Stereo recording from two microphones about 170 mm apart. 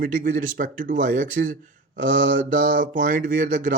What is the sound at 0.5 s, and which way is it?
Speech, 50° right (ahead or behind).